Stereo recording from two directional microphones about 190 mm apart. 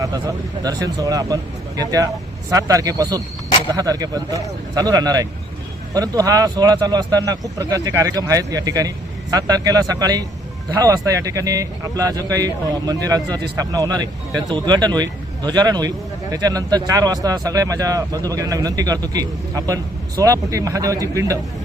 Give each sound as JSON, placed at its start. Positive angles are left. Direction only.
{"t": 0.0, "sound": "speech", "side_deg": -20}